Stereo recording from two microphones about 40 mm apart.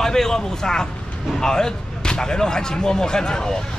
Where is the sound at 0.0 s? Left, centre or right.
Centre.